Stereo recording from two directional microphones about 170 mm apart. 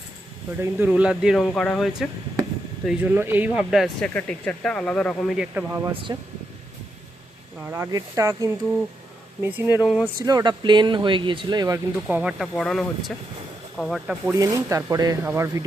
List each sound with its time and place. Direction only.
0.6 s speech: 10° right (ahead or behind)
5.4 s speech: 10° right (ahead or behind)
6.1 s speech: 25° right (ahead or behind)
7.6 s speech: 15° right (ahead or behind)
10.2 s speech: 25° right (ahead or behind)
12.0 s speech: 10° right (ahead or behind)
12.5 s speech: centre (ahead or behind)
14.3 s speech: 20° right (ahead or behind)